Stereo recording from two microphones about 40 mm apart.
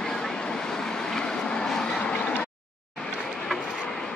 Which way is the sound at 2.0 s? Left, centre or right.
Left.